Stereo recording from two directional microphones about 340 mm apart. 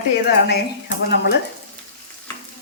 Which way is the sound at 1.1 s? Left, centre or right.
Left.